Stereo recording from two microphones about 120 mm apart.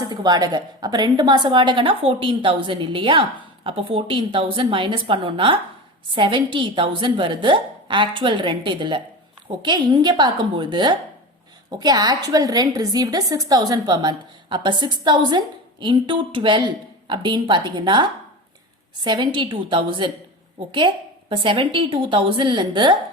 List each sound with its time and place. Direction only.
0.0 s a woman's voice: 35° right (ahead or behind)
19.0 s a woman's voice: 40° right (ahead or behind)